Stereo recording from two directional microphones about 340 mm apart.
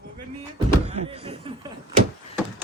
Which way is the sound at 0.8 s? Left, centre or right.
Centre.